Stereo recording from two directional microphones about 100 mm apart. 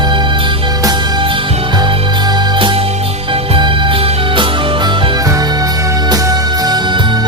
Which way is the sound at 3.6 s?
55° right (ahead or behind).